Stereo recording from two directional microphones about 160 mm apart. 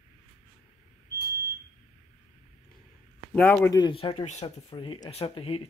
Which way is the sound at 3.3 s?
10° left (ahead or behind).